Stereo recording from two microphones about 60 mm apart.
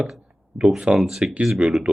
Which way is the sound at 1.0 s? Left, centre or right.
Centre.